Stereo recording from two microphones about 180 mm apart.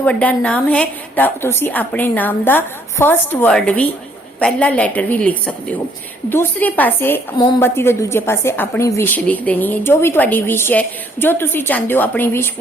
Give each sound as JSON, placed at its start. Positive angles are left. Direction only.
{"t": 0.0, "sound": "a woman's voice", "side_deg": 5}